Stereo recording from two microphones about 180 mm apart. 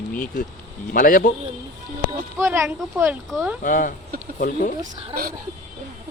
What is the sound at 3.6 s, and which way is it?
Speech, 50° left (ahead or behind).